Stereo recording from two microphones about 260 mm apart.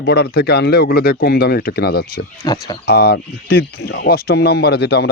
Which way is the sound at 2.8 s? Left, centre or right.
Left.